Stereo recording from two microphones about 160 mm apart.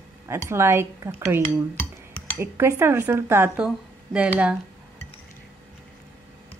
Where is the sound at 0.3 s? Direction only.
15° right (ahead or behind).